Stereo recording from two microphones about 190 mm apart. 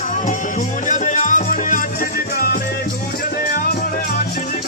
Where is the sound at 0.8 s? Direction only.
40° left (ahead or behind).